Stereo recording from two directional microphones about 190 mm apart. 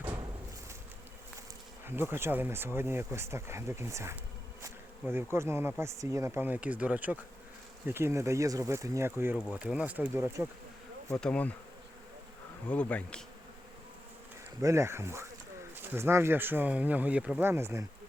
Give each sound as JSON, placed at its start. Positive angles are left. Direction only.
{"t": 1.9, "sound": "speech", "side_deg": -10}
{"t": 11.1, "sound": "bee", "side_deg": 5}
{"t": 12.6, "sound": "bee", "side_deg": 5}
{"t": 14.6, "sound": "speech", "side_deg": -15}